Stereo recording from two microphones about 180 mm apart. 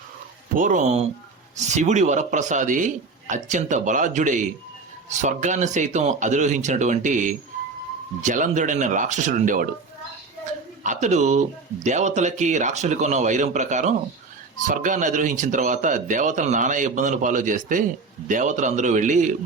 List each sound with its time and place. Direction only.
0.5 s speech: 50° right (ahead or behind)
10.8 s speech: 40° right (ahead or behind)